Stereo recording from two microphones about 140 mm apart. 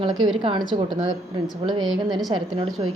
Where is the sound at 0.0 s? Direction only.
30° right (ahead or behind).